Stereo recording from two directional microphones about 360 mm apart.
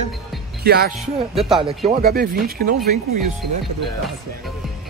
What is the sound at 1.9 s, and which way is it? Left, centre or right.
Speech, right.